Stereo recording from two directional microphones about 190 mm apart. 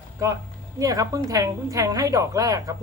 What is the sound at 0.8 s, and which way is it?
A woman's voice, 15° right (ahead or behind).